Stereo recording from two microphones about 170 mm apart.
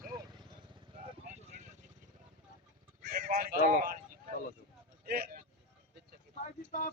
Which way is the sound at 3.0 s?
60° right (ahead or behind).